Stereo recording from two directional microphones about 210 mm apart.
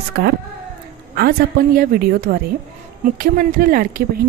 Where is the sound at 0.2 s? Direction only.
50° right (ahead or behind).